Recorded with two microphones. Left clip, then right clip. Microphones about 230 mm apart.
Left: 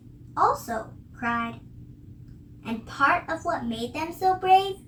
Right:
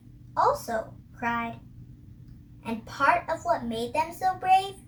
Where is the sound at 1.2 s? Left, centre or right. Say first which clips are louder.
Left 1 dB; right.